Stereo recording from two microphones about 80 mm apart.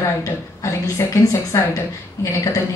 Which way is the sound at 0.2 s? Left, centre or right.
Left.